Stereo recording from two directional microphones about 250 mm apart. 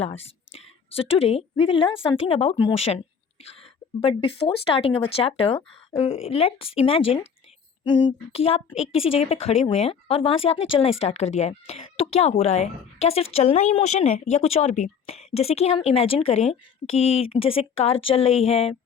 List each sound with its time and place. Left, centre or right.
0.0 s speech: left